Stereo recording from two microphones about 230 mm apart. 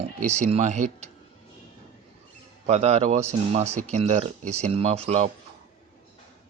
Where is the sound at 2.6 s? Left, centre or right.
Right.